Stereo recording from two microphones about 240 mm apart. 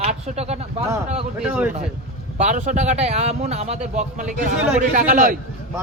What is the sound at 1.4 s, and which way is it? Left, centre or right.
Speech, centre.